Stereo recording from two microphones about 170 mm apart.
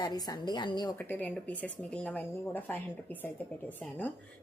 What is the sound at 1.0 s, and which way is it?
A woman's voice, 10° left (ahead or behind).